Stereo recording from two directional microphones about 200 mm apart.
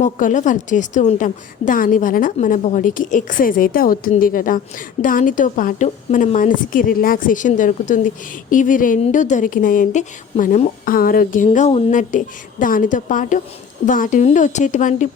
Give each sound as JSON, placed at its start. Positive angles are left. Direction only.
{"t": 0.0, "sound": "a woman's voice", "side_deg": 40}